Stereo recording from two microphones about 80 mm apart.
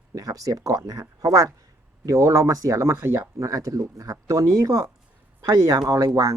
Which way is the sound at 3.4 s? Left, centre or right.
Right.